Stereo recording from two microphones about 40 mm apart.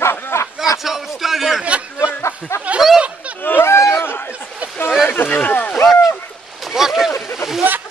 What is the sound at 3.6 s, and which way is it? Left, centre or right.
Speech, left.